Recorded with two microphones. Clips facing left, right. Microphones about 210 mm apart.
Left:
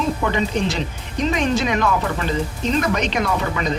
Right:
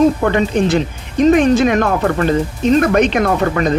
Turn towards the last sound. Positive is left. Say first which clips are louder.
# right 7 dB
turn(degrees=-50)  # may be behind; listen again after turning